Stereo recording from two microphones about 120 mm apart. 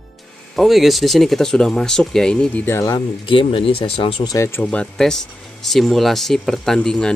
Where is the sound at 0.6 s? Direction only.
Centre (ahead or behind); by 2.8 s 15° left (ahead or behind).